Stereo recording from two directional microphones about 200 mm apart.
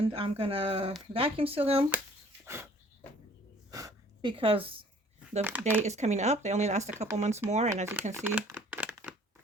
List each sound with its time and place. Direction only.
0.0 s speech: 25° right (ahead or behind)
2.4 s dog: 10° right (ahead or behind)
3.7 s a sound: 15° right (ahead or behind)
5.4 s speech: 10° right (ahead or behind)
5.8 s speech: 35° right (ahead or behind)
8.1 s crumpling: 10° right (ahead or behind)